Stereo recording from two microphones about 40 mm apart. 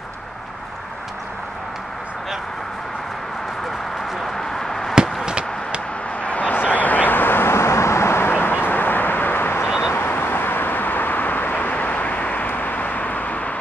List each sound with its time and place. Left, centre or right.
4.4 s chop: centre
5.2 s chop: right
6.2 s a sound: left
6.5 s vehicle: left
9.7 s vehicle: centre
9.9 s vehicle: left